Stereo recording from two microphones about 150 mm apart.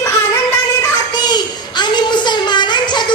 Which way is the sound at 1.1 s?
30° left (ahead or behind).